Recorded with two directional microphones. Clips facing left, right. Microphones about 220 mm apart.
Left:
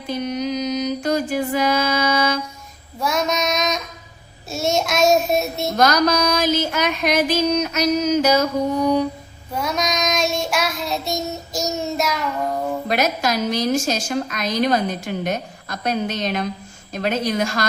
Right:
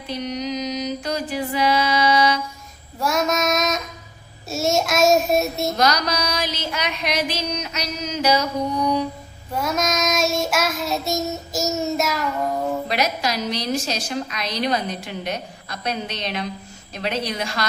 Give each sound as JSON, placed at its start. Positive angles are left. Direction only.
{"t": 0.1, "sound": "music", "side_deg": 50}
{"t": 3.0, "sound": "child singing", "side_deg": 0}
{"t": 5.7, "sound": "a woman's voice", "side_deg": 50}
{"t": 9.5, "sound": "child singing", "side_deg": 0}
{"t": 12.9, "sound": "a woman's voice", "side_deg": 50}